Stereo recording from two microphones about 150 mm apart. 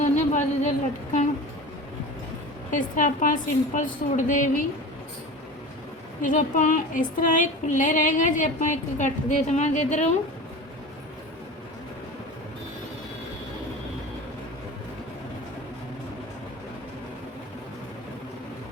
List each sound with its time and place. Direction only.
0.0 s a sound: 55° left (ahead or behind)
2.6 s female singing: 60° left (ahead or behind)
6.2 s female singing: 60° left (ahead or behind)